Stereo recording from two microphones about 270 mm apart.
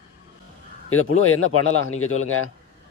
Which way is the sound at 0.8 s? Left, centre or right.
Left.